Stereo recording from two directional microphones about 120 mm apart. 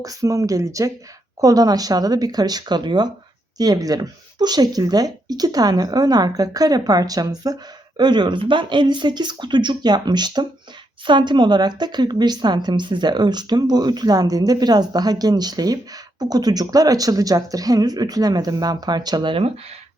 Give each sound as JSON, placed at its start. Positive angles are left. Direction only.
{"t": 0.0, "sound": "a woman's voice", "side_deg": -30}